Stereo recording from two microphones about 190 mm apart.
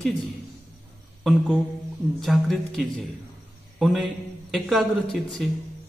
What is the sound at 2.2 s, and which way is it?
A man's voice, centre (ahead or behind).